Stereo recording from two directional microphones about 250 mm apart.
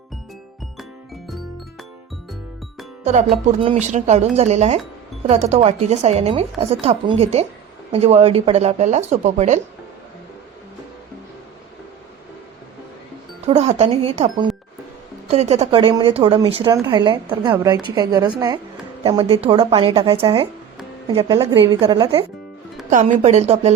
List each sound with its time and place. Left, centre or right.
3.0 s speech: right
13.4 s a woman's voice: right